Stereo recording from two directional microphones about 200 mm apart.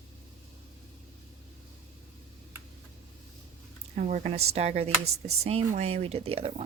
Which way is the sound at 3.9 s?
35° right (ahead or behind).